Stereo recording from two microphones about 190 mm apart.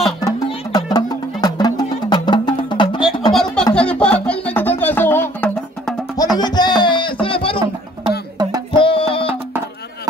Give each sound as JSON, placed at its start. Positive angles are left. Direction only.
{"t": 0.9, "sound": "music", "side_deg": 20}
{"t": 3.3, "sound": "music", "side_deg": 5}
{"t": 8.4, "sound": "music", "side_deg": -20}
{"t": 8.7, "sound": "music", "side_deg": 30}